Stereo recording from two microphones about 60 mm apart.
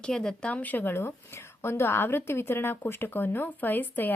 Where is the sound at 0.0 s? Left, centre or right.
Centre; by 0.9 s left.